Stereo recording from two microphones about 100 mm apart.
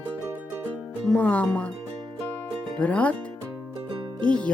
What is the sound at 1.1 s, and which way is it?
Speech, 15° left (ahead or behind).